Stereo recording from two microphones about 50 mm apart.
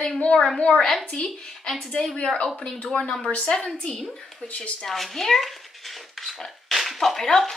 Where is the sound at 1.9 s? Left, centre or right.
Centre.